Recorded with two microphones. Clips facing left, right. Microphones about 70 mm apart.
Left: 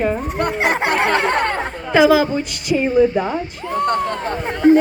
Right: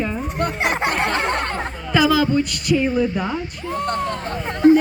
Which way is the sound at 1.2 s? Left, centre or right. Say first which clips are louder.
Left 4 dB; left.